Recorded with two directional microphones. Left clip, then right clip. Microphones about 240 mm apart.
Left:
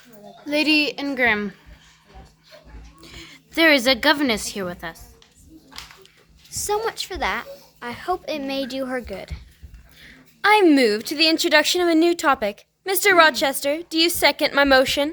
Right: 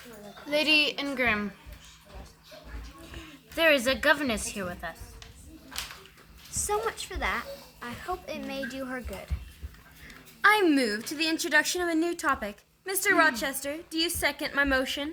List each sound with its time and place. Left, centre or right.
0.4 s speech: left
3.2 s a woman's voice: left
6.5 s speech: left
10.4 s speech: left